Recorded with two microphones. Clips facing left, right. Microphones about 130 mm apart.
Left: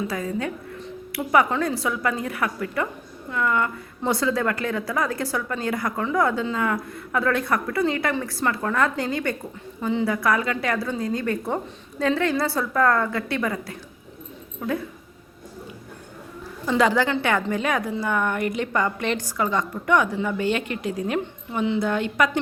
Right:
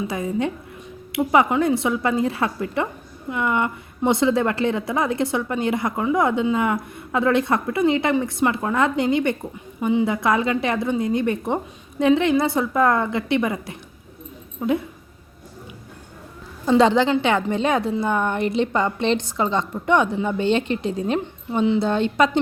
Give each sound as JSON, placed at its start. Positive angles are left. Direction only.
{"t": 0.1, "sound": "a woman's voice", "side_deg": -20}
{"t": 16.6, "sound": "a woman's voice", "side_deg": -25}